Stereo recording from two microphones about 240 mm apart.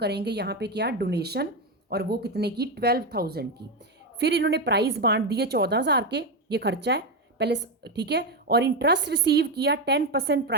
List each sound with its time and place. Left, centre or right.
0.0 s a woman's voice: right